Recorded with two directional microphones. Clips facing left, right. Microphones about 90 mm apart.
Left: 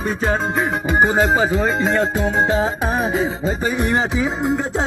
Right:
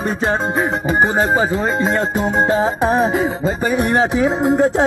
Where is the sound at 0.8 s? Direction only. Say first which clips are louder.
Left 1 dB; 30° right (ahead or behind).